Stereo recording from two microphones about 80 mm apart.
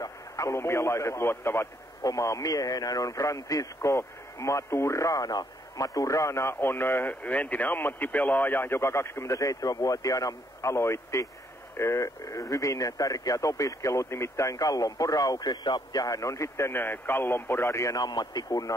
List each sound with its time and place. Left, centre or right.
0.0 s a man's voice: left
2.0 s a man's voice: left
17.9 s speech: left